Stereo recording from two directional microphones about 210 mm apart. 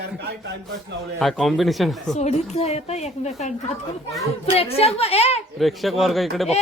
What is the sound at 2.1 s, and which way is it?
Speech, 35° left (ahead or behind).